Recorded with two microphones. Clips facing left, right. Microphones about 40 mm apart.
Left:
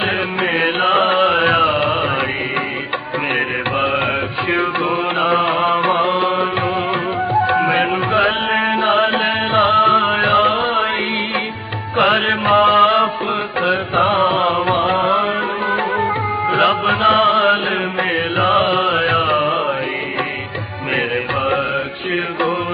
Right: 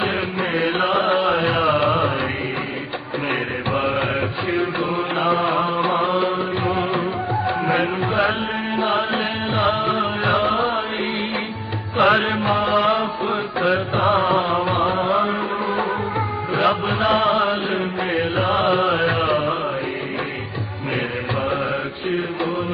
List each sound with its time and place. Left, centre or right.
0.5 s mantra: left
3.8 s mantra: left
5.2 s mantra: left
7.4 s music: left
11.9 s music: left
12.2 s music: left
16.5 s music: left